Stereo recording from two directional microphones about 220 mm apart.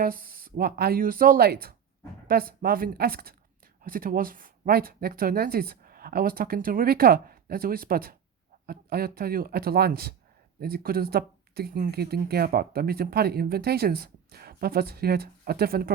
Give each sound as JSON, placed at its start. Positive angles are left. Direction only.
{"t": 0.0, "sound": "speech", "side_deg": -40}